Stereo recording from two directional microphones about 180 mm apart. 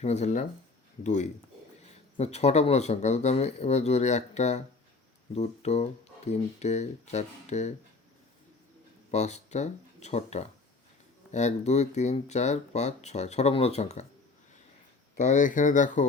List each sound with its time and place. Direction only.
0.0 s speech: 40° left (ahead or behind)
9.1 s speech: 40° left (ahead or behind)
15.2 s speech: 45° left (ahead or behind)